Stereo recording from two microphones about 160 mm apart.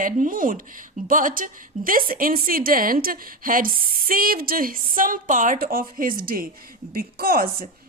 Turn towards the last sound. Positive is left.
turn(degrees=-65)  # may be behind; listen again after turning